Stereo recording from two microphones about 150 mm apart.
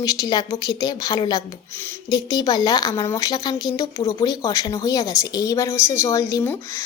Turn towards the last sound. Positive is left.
turn(degrees=20)  # may be behind; listen again after turning